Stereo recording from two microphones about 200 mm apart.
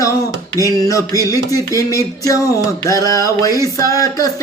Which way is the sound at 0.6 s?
15° left (ahead or behind).